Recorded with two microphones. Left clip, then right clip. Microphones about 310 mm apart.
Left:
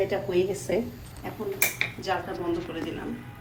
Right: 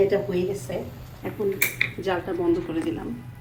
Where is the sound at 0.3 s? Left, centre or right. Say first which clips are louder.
Left 1 dB; left.